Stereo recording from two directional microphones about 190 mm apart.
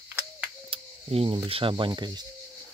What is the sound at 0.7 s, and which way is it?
Speech, 30° right (ahead or behind).